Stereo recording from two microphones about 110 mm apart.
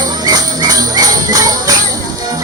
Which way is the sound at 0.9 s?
30° right (ahead or behind).